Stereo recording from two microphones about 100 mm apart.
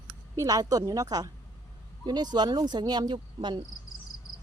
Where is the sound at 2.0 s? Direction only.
45° right (ahead or behind).